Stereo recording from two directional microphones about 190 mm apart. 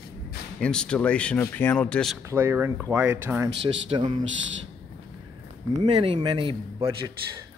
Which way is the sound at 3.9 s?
30° right (ahead or behind).